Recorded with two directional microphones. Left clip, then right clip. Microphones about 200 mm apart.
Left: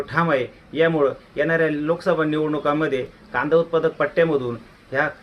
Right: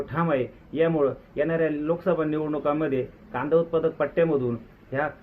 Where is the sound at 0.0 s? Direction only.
15° left (ahead or behind).